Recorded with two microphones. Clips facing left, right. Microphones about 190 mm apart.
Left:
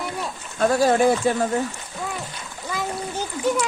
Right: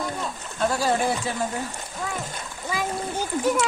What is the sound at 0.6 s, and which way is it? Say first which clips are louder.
Speech: left 6 dB; 55° left (ahead or behind).